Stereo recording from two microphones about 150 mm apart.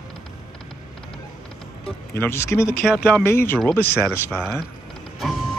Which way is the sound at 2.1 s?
15° left (ahead or behind).